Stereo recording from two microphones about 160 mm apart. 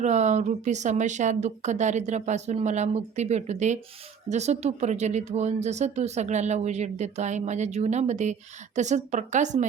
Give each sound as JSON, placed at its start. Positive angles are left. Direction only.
{"t": 0.0, "sound": "speech", "side_deg": -45}